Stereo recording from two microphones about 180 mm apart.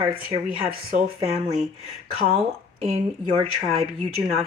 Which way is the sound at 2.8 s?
35° right (ahead or behind).